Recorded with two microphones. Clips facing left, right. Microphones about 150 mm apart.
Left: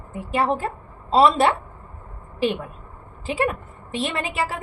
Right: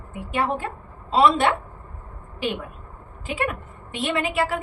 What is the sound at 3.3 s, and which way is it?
A woman's voice, 30° left (ahead or behind).